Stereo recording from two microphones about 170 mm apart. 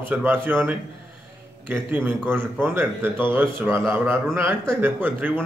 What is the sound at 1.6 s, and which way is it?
A man's voice, 15° right (ahead or behind).